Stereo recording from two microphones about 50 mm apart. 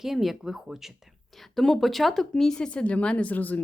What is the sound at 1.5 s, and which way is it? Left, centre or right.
Speech, centre.